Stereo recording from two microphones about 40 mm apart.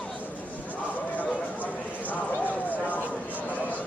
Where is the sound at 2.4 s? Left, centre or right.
Left.